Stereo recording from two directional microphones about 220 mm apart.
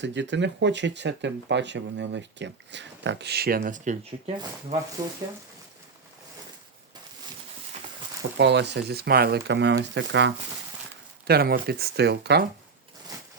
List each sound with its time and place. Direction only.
0.0 s speech: 55° right (ahead or behind)
3.6 s speech: 35° right (ahead or behind)
5.0 s speech: 15° right (ahead or behind)
8.4 s speech: 50° right (ahead or behind)